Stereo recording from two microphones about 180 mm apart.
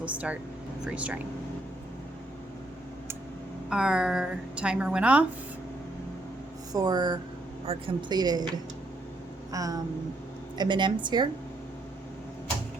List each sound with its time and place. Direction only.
0.0 s speech: 5° right (ahead or behind)
3.7 s a woman's voice: 5° right (ahead or behind)
6.7 s a woman's voice: 20° right (ahead or behind)
9.5 s a sound: 20° right (ahead or behind)
10.6 s a woman's voice: 25° right (ahead or behind)